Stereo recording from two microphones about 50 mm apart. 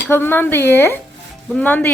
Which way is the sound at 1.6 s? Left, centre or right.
Left.